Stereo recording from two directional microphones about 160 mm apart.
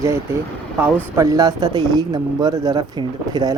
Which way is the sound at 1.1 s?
20° right (ahead or behind).